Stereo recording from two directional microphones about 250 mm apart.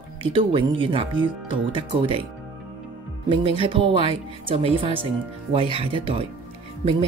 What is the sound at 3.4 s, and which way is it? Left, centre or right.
Speech, right.